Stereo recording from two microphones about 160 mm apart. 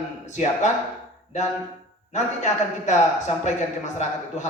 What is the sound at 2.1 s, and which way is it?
A man's voice, 45° left (ahead or behind).